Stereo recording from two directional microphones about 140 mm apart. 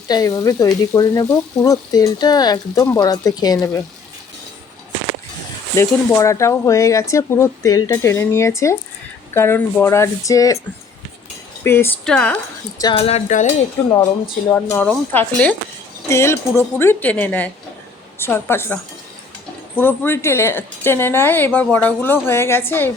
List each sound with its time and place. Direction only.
0.1 s speech: 25° left (ahead or behind)
5.7 s speech: 20° left (ahead or behind)
11.6 s a woman's voice: 15° left (ahead or behind)
13.0 s speech: 45° left (ahead or behind)
13.2 s cutlery: 60° left (ahead or behind)
14.5 s a woman's voice: 15° left (ahead or behind)